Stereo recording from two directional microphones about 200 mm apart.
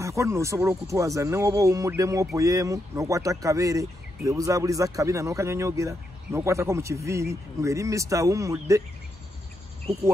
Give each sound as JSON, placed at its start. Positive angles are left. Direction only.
{"t": 0.0, "sound": "speech", "side_deg": -15}